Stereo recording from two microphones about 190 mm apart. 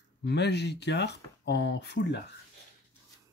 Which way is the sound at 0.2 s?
65° left (ahead or behind).